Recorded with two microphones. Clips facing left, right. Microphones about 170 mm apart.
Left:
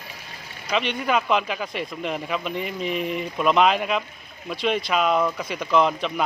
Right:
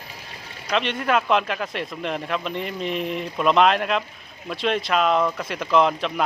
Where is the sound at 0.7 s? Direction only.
Centre (ahead or behind).